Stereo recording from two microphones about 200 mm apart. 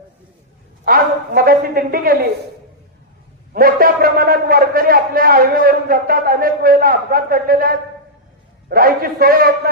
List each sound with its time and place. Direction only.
0.9 s a man's voice: 50° right (ahead or behind)
3.5 s a man's voice: 45° right (ahead or behind)